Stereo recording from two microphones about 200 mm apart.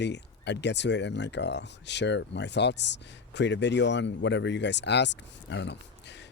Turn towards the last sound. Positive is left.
turn(degrees=60)  # may be behind; listen again after turning